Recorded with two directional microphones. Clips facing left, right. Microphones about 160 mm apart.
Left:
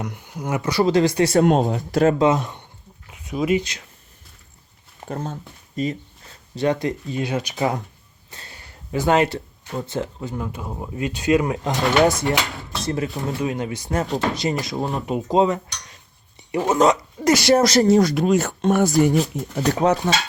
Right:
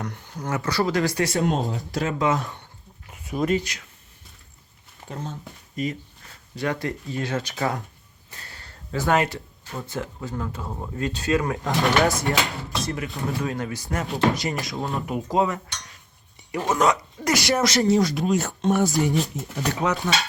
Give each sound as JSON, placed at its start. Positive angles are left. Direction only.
{"t": 0.0, "sound": "speech", "side_deg": 10}
{"t": 1.4, "sound": "speech", "side_deg": 60}
{"t": 2.0, "sound": "speech", "side_deg": 25}
{"t": 3.1, "sound": "a sound", "side_deg": 0}
{"t": 3.5, "sound": "speech", "side_deg": 25}
{"t": 5.0, "sound": "speech", "side_deg": 45}
{"t": 5.7, "sound": "speech", "side_deg": 30}
{"t": 8.4, "sound": "a sound", "side_deg": 20}
{"t": 9.8, "sound": "speech", "side_deg": 25}
{"t": 12.9, "sound": "speech", "side_deg": 30}
{"t": 13.2, "sound": "speech", "side_deg": 20}
{"t": 13.9, "sound": "speech", "side_deg": 40}
{"t": 14.3, "sound": "speech", "side_deg": 25}
{"t": 19.5, "sound": "speech", "side_deg": 35}